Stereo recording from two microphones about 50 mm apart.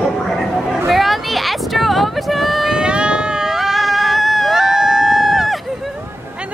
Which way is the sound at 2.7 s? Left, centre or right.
Centre.